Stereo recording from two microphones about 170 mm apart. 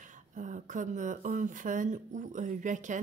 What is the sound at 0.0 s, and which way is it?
Speech, 50° right (ahead or behind).